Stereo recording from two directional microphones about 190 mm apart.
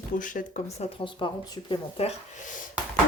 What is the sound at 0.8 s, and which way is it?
Speech, 30° left (ahead or behind).